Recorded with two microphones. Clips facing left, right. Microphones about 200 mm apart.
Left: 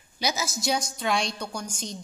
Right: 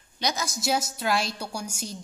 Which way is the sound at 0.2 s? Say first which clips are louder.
Even; 5° left (ahead or behind).